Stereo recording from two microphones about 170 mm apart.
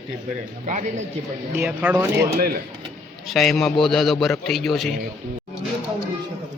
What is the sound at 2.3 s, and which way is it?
Speech, 60° right (ahead or behind).